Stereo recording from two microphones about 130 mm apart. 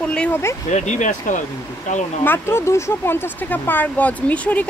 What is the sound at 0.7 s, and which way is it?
Speech, 65° left (ahead or behind).